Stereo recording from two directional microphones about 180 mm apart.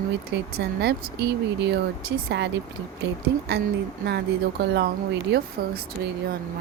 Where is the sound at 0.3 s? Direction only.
70° right (ahead or behind).